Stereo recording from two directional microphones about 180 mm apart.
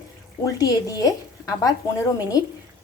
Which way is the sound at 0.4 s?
20° left (ahead or behind).